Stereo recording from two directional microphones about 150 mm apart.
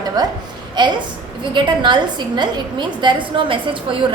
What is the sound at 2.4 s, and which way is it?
A woman's voice, 30° right (ahead or behind).